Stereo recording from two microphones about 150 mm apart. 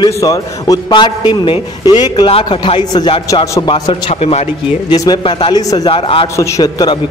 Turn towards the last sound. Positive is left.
turn(degrees=25)  # may be behind; listen again after turning